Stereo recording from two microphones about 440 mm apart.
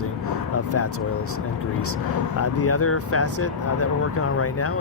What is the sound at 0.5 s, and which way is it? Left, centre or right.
Speech, left.